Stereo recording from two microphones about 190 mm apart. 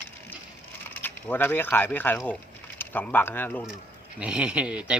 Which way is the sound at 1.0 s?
10° left (ahead or behind).